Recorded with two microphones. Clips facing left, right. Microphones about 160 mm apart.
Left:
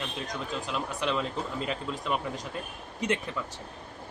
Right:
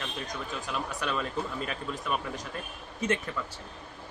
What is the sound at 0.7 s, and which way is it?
Speech, 20° left (ahead or behind).